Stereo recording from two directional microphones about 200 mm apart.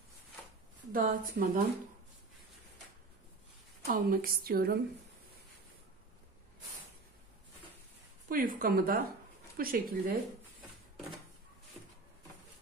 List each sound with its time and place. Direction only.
0.9 s a woman's voice: 45° right (ahead or behind)
3.8 s a woman's voice: 45° right (ahead or behind)
8.3 s a woman's voice: 45° right (ahead or behind)